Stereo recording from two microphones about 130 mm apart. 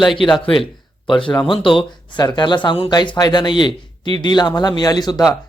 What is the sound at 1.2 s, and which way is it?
A man's voice, 40° left (ahead or behind).